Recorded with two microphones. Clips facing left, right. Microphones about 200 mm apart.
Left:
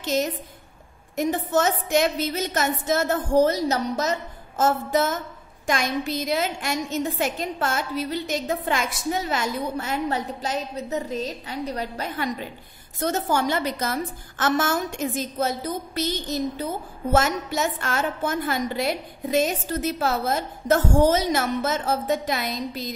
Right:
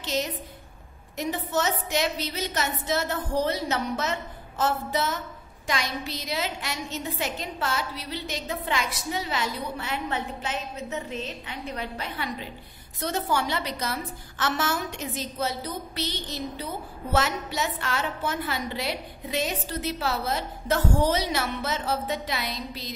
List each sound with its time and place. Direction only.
0.0 s a woman's voice: 45° left (ahead or behind)